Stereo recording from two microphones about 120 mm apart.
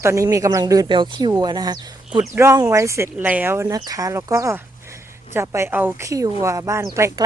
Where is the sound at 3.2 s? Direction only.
15° right (ahead or behind).